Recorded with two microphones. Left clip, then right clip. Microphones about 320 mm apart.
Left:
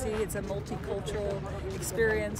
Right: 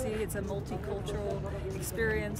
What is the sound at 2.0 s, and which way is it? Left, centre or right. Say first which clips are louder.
Speech: left 4 dB; centre.